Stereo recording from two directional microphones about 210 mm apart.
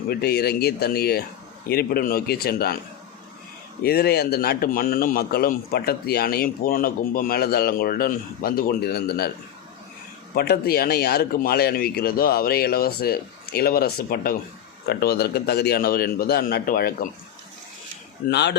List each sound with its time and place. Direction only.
0.1 s a man's voice: 50° left (ahead or behind)
3.8 s a man's voice: 50° left (ahead or behind)
10.3 s a man's voice: 45° left (ahead or behind)
18.3 s a man's voice: 55° left (ahead or behind)